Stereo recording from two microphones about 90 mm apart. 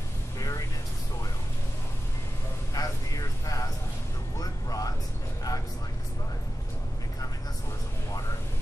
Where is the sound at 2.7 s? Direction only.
40° left (ahead or behind).